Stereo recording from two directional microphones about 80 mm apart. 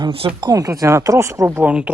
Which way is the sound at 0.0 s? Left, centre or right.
Right.